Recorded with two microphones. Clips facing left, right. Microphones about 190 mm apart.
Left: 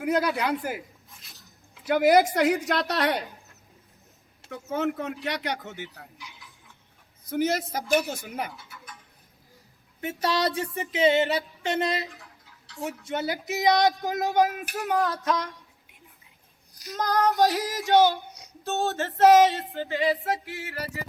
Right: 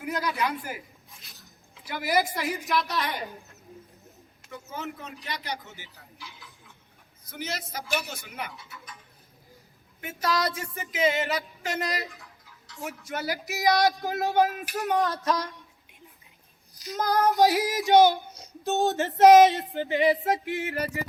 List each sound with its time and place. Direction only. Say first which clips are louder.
0.0 s speech: left 4 dB; 65° left (ahead or behind)
1.1 s a sound: even; centre (ahead or behind)
1.9 s a woman's voice: left 8 dB; 65° left (ahead or behind)
4.4 s speech: left 9 dB; 70° left (ahead or behind)
7.3 s a woman's voice: left 10 dB; 50° left (ahead or behind)
10.0 s a woman's voice: left 1 dB; 35° left (ahead or behind)
10.5 s music: left 6 dB; 35° left (ahead or behind)
12.6 s a sound: left 4 dB; 30° left (ahead or behind)
13.1 s music: left 2 dB; 20° left (ahead or behind)
14.0 s speech: left 1 dB; 15° left (ahead or behind)
14.8 s a sound: even; centre (ahead or behind)
16.9 s female singing: even; 10° right (ahead or behind)
19.7 s music: right 3 dB; 20° right (ahead or behind)